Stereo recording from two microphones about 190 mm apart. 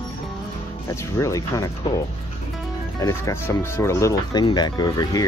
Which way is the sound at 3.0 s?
15° left (ahead or behind).